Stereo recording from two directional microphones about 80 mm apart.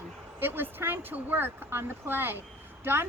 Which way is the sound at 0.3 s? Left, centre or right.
Right.